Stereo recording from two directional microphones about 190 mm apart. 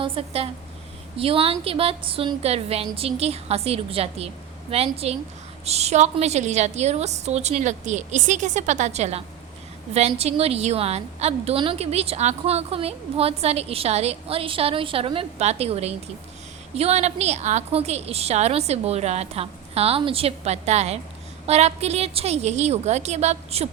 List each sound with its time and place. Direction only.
0.0 s a woman's voice: 30° right (ahead or behind)